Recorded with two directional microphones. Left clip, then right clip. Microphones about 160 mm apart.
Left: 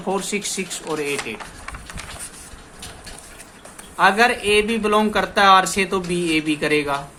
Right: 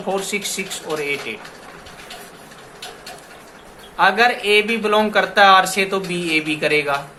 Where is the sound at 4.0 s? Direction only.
25° left (ahead or behind).